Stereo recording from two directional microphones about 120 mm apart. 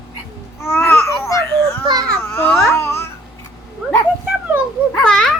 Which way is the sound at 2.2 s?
20° left (ahead or behind).